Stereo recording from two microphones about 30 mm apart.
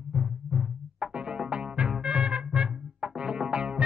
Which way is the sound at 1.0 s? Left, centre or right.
Right.